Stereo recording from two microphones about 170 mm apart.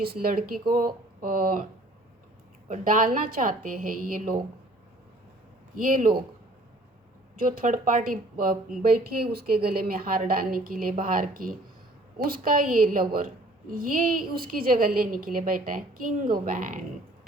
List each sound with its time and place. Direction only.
0.0 s a woman's voice: 60° right (ahead or behind)
2.6 s a woman's voice: 50° right (ahead or behind)
5.7 s a woman's voice: 50° right (ahead or behind)
7.4 s a woman's voice: 55° right (ahead or behind)